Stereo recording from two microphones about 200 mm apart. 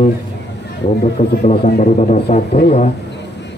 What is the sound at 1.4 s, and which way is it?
A man's voice, 35° left (ahead or behind).